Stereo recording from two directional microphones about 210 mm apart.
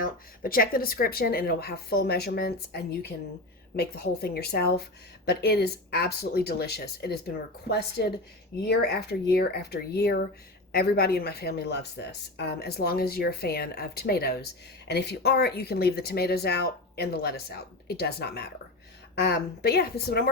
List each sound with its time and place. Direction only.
0.0 s a woman's voice: 45° left (ahead or behind)